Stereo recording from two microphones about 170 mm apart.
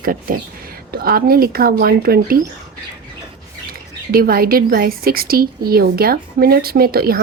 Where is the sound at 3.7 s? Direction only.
60° right (ahead or behind).